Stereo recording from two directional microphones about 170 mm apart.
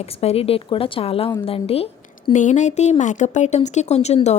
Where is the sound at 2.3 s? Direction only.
45° left (ahead or behind).